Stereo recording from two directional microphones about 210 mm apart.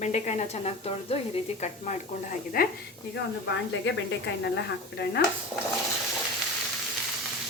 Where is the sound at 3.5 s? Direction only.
60° left (ahead or behind).